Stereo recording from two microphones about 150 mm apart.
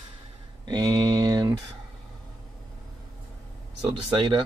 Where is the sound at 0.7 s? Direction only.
30° right (ahead or behind).